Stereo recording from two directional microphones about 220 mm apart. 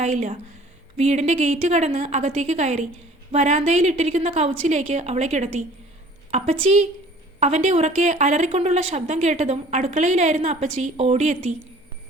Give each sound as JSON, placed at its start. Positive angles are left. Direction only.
{"t": 0.0, "sound": "a woman's voice", "side_deg": -35}
{"t": 7.3, "sound": "a woman's voice", "side_deg": -30}